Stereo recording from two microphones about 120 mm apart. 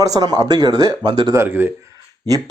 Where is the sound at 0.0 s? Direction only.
30° right (ahead or behind).